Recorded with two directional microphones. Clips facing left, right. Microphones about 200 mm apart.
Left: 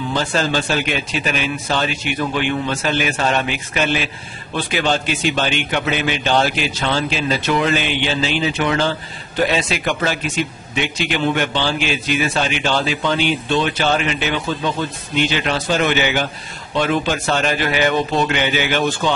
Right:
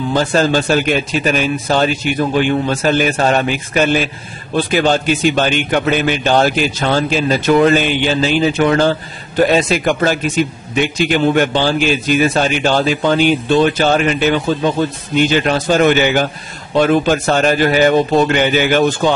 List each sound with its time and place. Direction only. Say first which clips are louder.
0.1 s a man's voice: right 6 dB; 45° right (ahead or behind)